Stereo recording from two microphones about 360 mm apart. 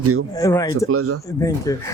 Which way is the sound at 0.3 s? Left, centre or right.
Centre.